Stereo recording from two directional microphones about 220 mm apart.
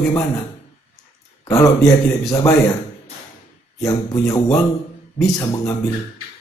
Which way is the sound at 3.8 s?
15° left (ahead or behind).